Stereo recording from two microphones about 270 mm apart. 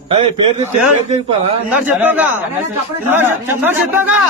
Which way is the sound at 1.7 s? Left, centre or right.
Centre.